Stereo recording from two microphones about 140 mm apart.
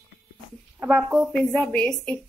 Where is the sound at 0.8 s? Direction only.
5° right (ahead or behind).